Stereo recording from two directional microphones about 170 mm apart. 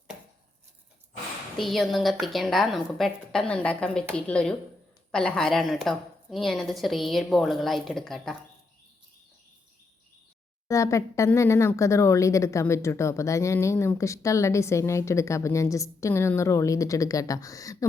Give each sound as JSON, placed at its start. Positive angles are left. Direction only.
{"t": 1.5, "sound": "a woman's voice", "side_deg": 0}
{"t": 10.7, "sound": "speech", "side_deg": 20}